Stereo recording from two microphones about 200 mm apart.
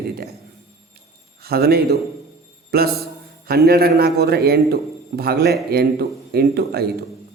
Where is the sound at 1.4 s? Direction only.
50° right (ahead or behind).